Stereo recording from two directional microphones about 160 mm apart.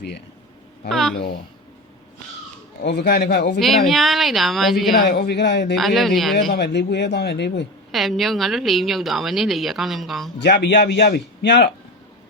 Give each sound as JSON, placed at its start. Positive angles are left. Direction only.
{"t": 0.9, "sound": "a woman's voice", "side_deg": 0}
{"t": 2.8, "sound": "a man's voice", "side_deg": 90}
{"t": 3.6, "sound": "a woman's voice", "side_deg": 0}
{"t": 5.0, "sound": "a man's voice", "side_deg": 90}
{"t": 5.7, "sound": "a woman's voice", "side_deg": 0}
{"t": 6.5, "sound": "a man's voice", "side_deg": 90}
{"t": 7.9, "sound": "a woman's voice", "side_deg": 0}
{"t": 10.4, "sound": "a man's voice", "side_deg": 90}